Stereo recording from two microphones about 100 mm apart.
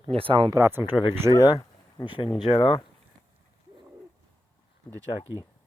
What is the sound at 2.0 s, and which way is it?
Speech, 55° left (ahead or behind).